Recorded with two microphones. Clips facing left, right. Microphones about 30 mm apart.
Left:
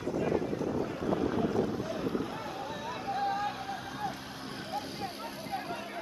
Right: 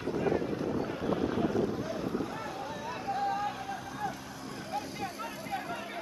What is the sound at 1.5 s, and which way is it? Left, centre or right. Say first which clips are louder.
Boat: even; centre.